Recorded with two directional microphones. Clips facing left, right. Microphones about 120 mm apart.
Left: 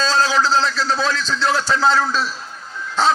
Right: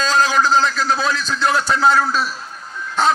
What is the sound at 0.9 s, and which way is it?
A man's voice, 15° right (ahead or behind).